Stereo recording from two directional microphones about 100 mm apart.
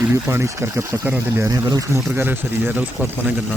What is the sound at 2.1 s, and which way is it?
Speech, 20° right (ahead or behind).